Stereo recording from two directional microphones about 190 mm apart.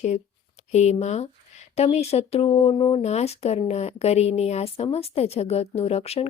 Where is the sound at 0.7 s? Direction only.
35° left (ahead or behind).